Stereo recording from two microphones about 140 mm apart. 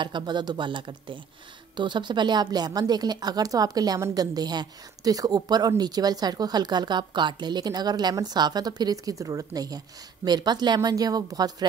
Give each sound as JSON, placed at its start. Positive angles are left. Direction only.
{"t": 0.0, "sound": "a woman's voice", "side_deg": -35}